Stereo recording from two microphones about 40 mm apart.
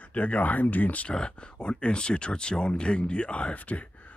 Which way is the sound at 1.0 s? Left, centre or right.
Left.